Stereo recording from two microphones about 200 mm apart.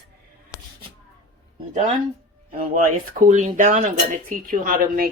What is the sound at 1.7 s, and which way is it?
Speech, 35° right (ahead or behind).